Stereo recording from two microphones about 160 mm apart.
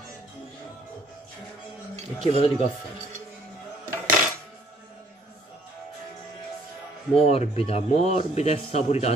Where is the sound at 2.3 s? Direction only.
40° left (ahead or behind).